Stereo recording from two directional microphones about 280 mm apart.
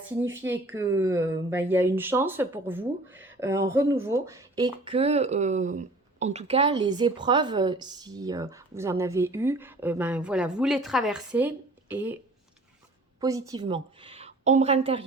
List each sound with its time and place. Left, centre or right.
0.2 s speech: centre
13.1 s a woman's voice: centre